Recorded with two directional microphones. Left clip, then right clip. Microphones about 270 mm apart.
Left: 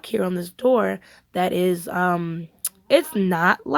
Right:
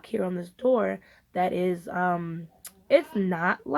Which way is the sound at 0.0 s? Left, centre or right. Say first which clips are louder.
Left 6 dB; left.